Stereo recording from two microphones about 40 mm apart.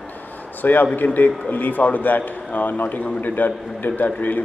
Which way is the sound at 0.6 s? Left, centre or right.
Left.